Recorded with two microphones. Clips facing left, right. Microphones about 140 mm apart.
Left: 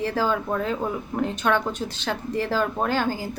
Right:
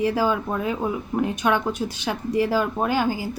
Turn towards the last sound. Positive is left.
turn(degrees=-10)  # may be behind; listen again after turning